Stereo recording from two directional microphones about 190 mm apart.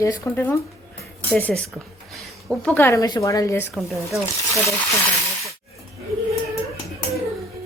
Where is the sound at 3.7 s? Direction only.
Centre (ahead or behind).